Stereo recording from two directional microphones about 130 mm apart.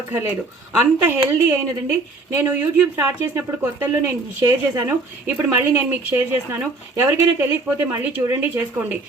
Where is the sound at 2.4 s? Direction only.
15° right (ahead or behind).